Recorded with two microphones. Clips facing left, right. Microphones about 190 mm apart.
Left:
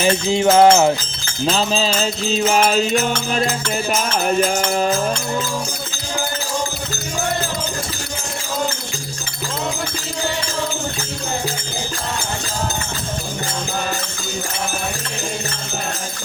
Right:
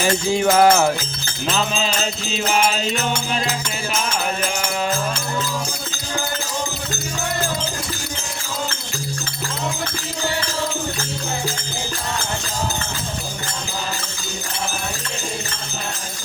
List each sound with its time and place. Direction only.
0.0 s music: 25° left (ahead or behind)
1.5 s mantra: 35° left (ahead or behind)